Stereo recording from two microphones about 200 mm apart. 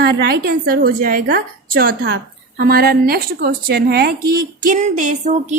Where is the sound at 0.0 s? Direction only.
55° right (ahead or behind).